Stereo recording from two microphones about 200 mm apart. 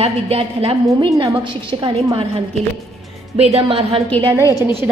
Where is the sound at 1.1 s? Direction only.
15° right (ahead or behind).